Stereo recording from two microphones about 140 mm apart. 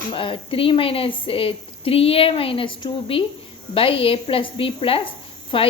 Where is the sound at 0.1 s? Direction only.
40° left (ahead or behind).